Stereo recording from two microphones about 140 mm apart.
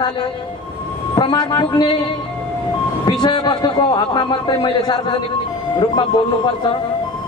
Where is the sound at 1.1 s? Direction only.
30° left (ahead or behind).